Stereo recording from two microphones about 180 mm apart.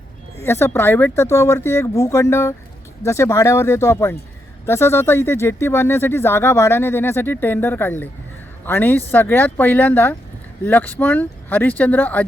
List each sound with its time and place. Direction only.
0.4 s speech: 15° left (ahead or behind)